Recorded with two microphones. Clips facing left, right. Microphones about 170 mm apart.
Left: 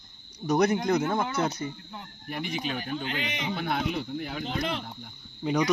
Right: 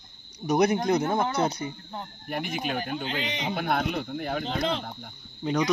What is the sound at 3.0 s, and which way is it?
Speech, 20° right (ahead or behind).